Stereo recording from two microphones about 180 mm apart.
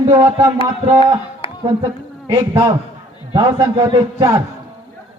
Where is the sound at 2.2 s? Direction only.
20° right (ahead or behind).